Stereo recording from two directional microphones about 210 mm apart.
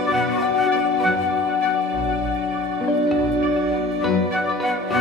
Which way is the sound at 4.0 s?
Centre (ahead or behind).